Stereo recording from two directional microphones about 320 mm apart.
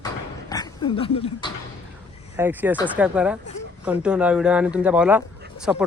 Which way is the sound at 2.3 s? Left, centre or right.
Centre.